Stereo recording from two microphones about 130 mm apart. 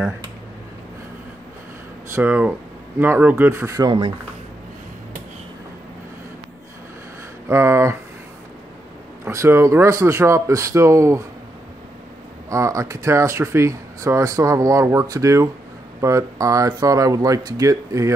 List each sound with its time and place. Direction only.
2.1 s speech: 10° right (ahead or behind)
7.4 s speech: 20° right (ahead or behind)
9.2 s speech: 20° right (ahead or behind)
12.4 s speech: 25° right (ahead or behind)